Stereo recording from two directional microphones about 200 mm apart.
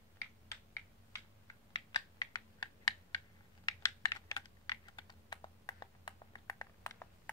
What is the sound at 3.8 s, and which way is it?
Computer keyboard, 15° left (ahead or behind).